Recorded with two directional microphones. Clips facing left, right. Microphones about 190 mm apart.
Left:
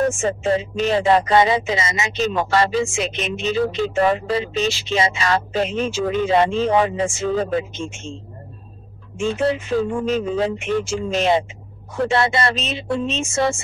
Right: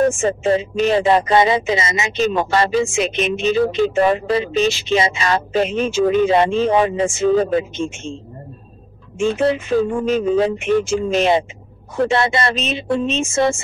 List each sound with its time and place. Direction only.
0.2 s speech: 20° right (ahead or behind)
9.2 s speech: 20° right (ahead or behind)